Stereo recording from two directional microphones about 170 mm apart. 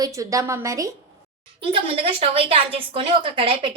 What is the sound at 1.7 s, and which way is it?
A woman's voice, 35° right (ahead or behind).